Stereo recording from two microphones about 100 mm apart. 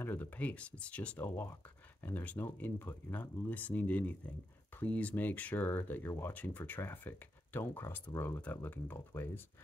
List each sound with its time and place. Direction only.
0.0 s speech: 20° left (ahead or behind)